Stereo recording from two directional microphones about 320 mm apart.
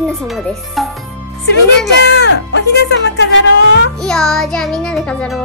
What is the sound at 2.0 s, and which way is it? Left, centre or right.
Speech, left.